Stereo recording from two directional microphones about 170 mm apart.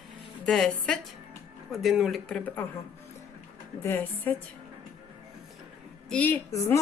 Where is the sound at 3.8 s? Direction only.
10° left (ahead or behind).